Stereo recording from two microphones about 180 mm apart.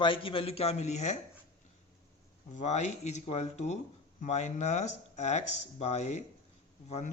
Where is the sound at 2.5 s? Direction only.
40° left (ahead or behind).